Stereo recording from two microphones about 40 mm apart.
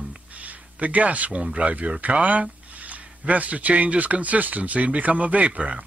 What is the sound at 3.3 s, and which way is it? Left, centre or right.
Speech, right.